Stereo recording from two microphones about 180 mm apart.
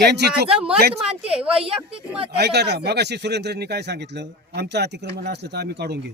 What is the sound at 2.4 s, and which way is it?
Speech, 65° right (ahead or behind).